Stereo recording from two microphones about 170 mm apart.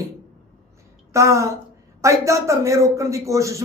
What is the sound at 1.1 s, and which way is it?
A man's voice, 15° right (ahead or behind).